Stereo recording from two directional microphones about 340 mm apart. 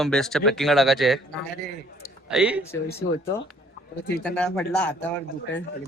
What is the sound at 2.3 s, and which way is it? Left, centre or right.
Speech, centre.